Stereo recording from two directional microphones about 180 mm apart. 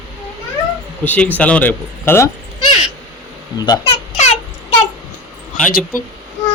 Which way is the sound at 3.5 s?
20° left (ahead or behind).